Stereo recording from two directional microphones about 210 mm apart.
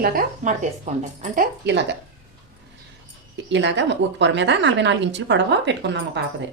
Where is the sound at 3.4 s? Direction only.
55° right (ahead or behind).